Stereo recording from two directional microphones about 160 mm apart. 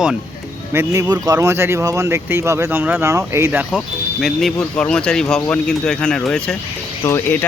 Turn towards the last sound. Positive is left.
turn(degrees=15)  # may be behind; listen again after turning